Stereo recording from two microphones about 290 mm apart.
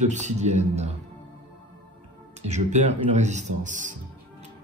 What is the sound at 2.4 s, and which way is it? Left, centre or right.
A man's voice, right.